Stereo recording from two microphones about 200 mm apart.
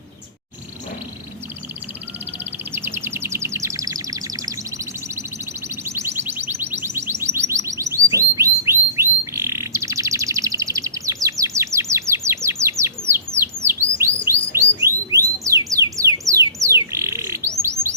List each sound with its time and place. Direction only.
2.7 s a sound: 10° right (ahead or behind)
5.6 s music: 15° right (ahead or behind)
14.5 s bird: 15° right (ahead or behind)